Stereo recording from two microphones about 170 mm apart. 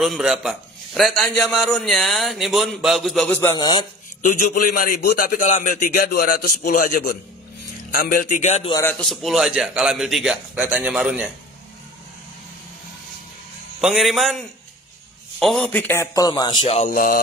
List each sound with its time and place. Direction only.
0.0 s a man's voice: centre (ahead or behind)
3.5 s a man's voice: 25° left (ahead or behind)
4.2 s a man's voice: 55° left (ahead or behind)
8.8 s a man's voice: 5° left (ahead or behind)
13.7 s a man's voice: centre (ahead or behind); by 16.9 s 35° left (ahead or behind)
16.9 s a man's voice: 55° left (ahead or behind)